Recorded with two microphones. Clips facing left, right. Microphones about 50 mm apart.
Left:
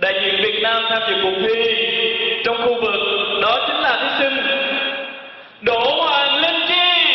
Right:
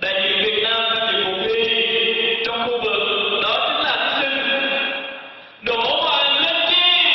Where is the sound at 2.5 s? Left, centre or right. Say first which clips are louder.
Left 3 dB; left.